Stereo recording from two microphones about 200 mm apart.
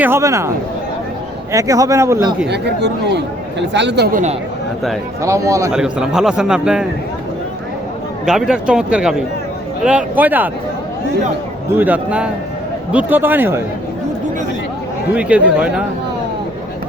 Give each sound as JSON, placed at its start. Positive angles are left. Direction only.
{"t": 0.0, "sound": "speech", "side_deg": -15}
{"t": 1.5, "sound": "speech", "side_deg": -15}
{"t": 2.5, "sound": "speech", "side_deg": -55}
{"t": 5.2, "sound": "speech", "side_deg": -15}
{"t": 5.7, "sound": "a man's voice", "side_deg": -5}
{"t": 8.2, "sound": "a man's voice", "side_deg": -5}
{"t": 11.8, "sound": "speech", "side_deg": -5}
{"t": 15.1, "sound": "a man's voice", "side_deg": -5}